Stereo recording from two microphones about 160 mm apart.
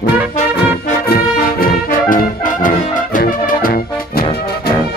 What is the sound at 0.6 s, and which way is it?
Music, 75° left (ahead or behind).